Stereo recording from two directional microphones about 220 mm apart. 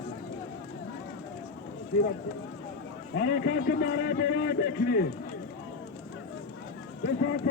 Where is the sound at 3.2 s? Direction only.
50° left (ahead or behind).